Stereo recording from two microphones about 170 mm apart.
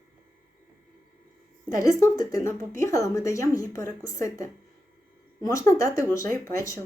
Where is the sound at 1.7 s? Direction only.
20° left (ahead or behind).